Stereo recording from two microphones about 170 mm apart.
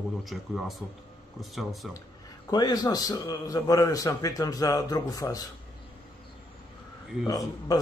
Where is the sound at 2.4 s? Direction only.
25° left (ahead or behind).